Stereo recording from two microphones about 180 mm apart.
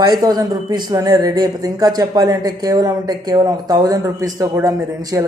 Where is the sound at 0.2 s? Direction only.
20° right (ahead or behind).